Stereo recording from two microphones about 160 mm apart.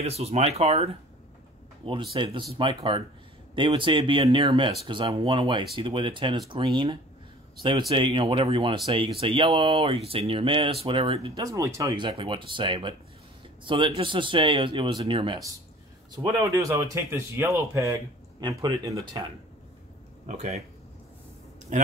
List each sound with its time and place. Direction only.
0.0 s speech: 40° right (ahead or behind)
11.3 s speech: 20° right (ahead or behind)
16.5 s speech: 20° right (ahead or behind)
20.2 s speech: 50° right (ahead or behind)
21.7 s speech: 50° right (ahead or behind)